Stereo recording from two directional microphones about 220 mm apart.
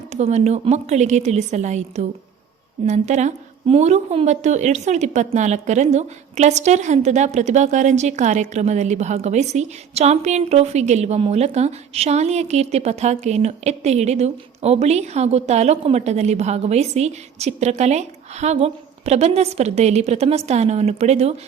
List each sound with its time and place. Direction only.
0.1 s a woman's voice: 30° right (ahead or behind)